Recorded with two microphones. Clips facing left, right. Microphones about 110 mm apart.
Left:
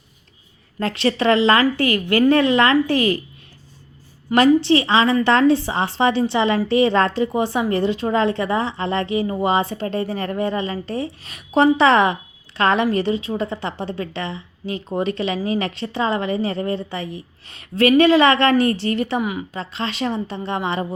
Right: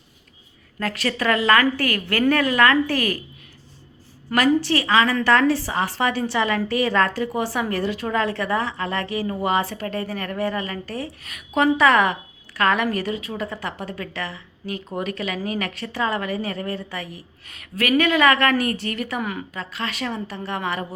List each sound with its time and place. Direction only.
0.8 s a woman's voice: 25° left (ahead or behind)
4.4 s a woman's voice: 25° left (ahead or behind)
19.2 s speech: 15° left (ahead or behind)
19.5 s a woman's voice: 25° left (ahead or behind)